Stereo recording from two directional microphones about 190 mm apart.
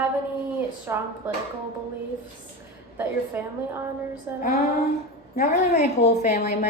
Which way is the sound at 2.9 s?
10° right (ahead or behind).